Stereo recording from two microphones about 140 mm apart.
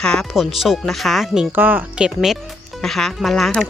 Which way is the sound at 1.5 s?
15° right (ahead or behind).